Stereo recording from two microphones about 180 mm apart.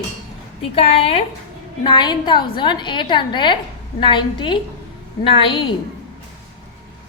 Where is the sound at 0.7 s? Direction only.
30° left (ahead or behind).